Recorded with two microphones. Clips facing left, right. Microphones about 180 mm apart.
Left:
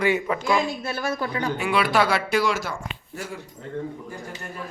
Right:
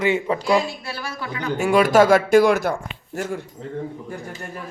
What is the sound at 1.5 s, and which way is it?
Speech, 45° right (ahead or behind).